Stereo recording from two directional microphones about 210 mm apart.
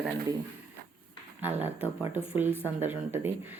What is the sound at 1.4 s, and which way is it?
Speech, 10° right (ahead or behind).